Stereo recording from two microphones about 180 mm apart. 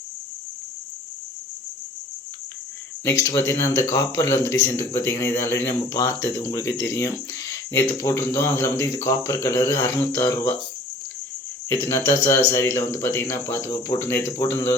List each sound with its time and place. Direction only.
3.0 s speech: 15° left (ahead or behind)
11.7 s speech: 15° left (ahead or behind)